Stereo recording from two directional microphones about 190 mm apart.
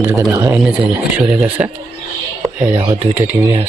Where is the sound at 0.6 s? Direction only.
5° right (ahead or behind).